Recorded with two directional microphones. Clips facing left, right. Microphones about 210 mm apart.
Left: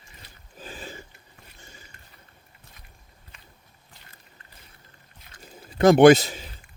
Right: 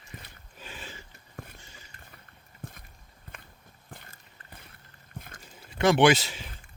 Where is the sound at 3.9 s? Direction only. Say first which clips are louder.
Right 7 dB; 50° right (ahead or behind).